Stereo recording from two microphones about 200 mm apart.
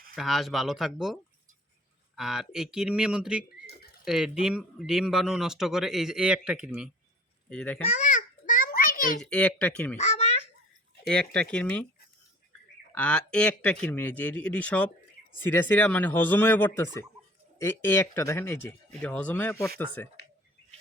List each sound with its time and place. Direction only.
0.2 s speech: centre (ahead or behind)
7.5 s speech: 5° left (ahead or behind)
7.9 s a sound: 35° left (ahead or behind)
9.2 s speech: 5° left (ahead or behind)
10.0 s babbling: 35° left (ahead or behind)
11.0 s speech: 5° left (ahead or behind)
12.9 s speech: 5° left (ahead or behind)